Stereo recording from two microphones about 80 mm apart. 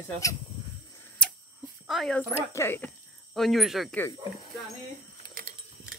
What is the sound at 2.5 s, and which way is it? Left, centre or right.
Speech, left.